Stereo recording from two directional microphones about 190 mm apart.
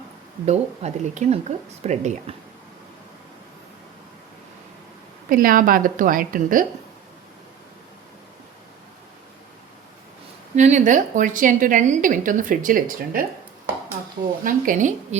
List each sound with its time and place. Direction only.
0.4 s speech: 35° right (ahead or behind)
5.3 s a woman's voice: 50° right (ahead or behind)
10.5 s a woman's voice: 40° right (ahead or behind)
14.4 s a woman's voice: 45° right (ahead or behind)